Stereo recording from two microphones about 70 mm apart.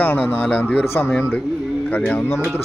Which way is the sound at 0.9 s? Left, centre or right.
Left.